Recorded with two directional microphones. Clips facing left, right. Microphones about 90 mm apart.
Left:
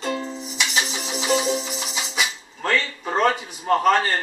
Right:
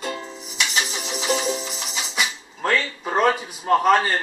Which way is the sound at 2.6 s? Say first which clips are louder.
Right 1 dB; 10° right (ahead or behind).